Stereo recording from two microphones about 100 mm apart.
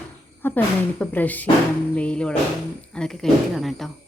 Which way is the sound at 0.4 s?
15° left (ahead or behind).